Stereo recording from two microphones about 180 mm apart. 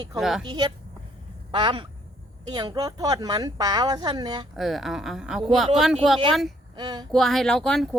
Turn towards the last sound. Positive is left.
turn(degrees=5)  # may be behind; listen again after turning